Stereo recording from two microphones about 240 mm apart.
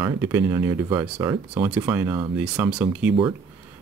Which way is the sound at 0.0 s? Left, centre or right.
Centre.